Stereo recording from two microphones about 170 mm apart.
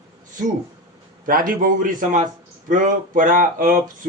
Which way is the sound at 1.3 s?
55° right (ahead or behind).